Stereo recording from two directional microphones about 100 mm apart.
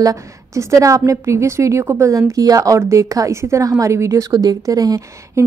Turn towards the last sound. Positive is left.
turn(degrees=-35)  # may be behind; listen again after turning